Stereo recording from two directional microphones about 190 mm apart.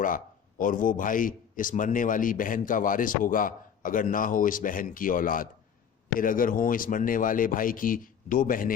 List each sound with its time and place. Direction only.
0.6 s a man's voice: 45° left (ahead or behind)